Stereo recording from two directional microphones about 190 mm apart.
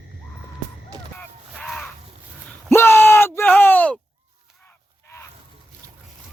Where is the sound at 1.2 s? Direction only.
5° left (ahead or behind).